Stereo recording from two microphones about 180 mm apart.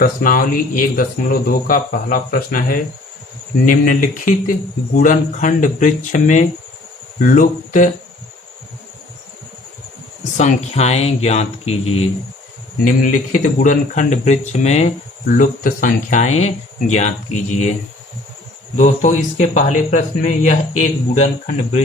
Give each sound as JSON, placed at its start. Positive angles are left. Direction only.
{"t": 0.0, "sound": "speech", "side_deg": 50}
{"t": 10.3, "sound": "speech", "side_deg": 40}
{"t": 12.8, "sound": "speech", "side_deg": 50}
{"t": 18.8, "sound": "speech", "side_deg": 40}